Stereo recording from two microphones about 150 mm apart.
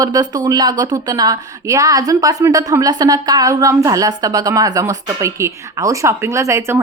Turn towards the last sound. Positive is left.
turn(degrees=-20)  # may be behind; listen again after turning